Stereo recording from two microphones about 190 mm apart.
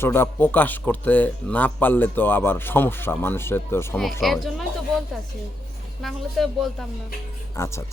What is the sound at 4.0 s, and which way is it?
Speech, centre (ahead or behind).